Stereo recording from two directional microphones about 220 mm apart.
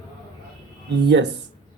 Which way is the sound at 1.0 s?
50° right (ahead or behind).